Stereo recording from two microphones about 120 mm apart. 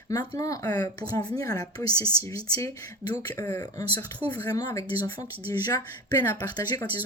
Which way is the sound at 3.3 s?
20° left (ahead or behind).